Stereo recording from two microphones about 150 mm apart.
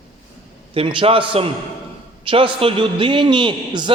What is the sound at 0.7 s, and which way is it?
A man's voice, 35° right (ahead or behind).